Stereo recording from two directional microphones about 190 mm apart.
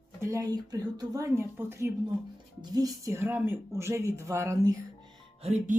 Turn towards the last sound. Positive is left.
turn(degrees=-35)  # may be behind; listen again after turning